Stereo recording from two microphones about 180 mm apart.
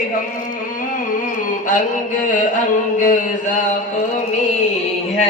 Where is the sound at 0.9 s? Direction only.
45° left (ahead or behind).